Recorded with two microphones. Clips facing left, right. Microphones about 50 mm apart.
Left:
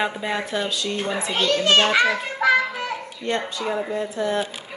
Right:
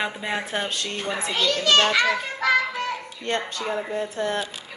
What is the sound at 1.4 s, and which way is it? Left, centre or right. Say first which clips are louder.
Speech: left 2 dB; left.